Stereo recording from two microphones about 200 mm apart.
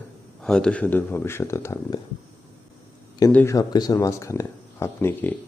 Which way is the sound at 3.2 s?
15° left (ahead or behind).